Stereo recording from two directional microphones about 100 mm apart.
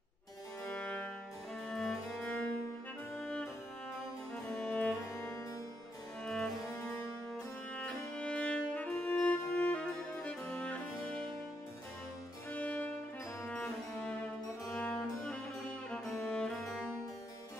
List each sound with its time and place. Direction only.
0.7 s music: 10° left (ahead or behind)
4.6 s music: 10° left (ahead or behind)
6.2 s music: 5° left (ahead or behind)
6.7 s music: 30° left (ahead or behind)
7.7 s music: 10° left (ahead or behind)
12.4 s music: 15° left (ahead or behind); by 16.9 s centre (ahead or behind)